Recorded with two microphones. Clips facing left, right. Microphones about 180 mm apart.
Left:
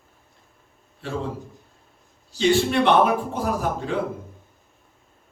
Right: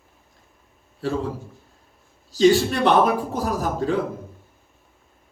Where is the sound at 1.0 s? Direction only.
40° right (ahead or behind).